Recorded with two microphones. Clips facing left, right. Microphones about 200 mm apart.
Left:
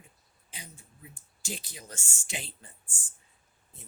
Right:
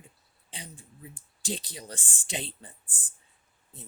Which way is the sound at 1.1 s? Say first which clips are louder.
Right 5 dB; 35° right (ahead or behind).